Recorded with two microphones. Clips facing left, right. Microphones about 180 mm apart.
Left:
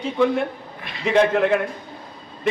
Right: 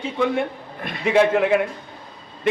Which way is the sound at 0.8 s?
50° right (ahead or behind).